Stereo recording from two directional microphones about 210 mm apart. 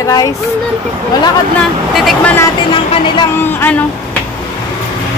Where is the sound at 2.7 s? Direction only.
25° left (ahead or behind).